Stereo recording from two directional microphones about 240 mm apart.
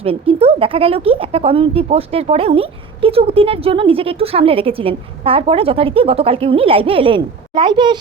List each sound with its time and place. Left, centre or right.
0.0 s speech: right